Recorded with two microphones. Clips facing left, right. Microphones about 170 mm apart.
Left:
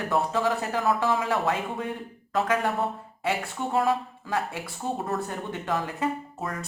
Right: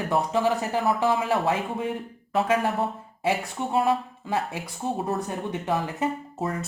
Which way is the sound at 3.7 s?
20° right (ahead or behind).